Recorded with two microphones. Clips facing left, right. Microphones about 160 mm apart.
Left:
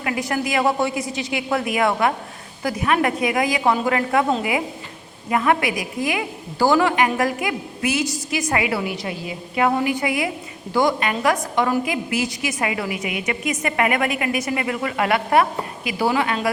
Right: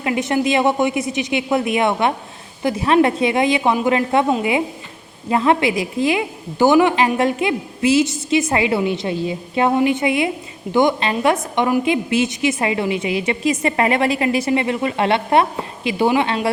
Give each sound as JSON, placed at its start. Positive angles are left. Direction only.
{"t": 0.0, "sound": "a woman's voice", "side_deg": -25}
{"t": 5.3, "sound": "a woman's voice", "side_deg": -25}